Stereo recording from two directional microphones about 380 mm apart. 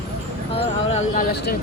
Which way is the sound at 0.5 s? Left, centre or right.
Centre.